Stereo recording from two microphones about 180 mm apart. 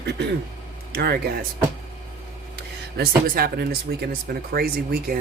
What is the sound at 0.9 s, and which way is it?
Speech, 60° right (ahead or behind).